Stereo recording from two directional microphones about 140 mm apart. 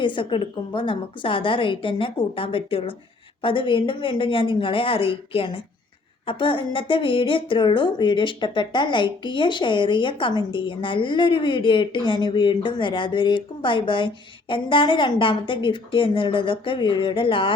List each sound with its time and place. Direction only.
0.0 s a woman's voice: 35° left (ahead or behind)